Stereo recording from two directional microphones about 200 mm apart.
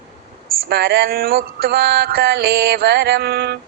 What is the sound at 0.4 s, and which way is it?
Speech, 50° right (ahead or behind).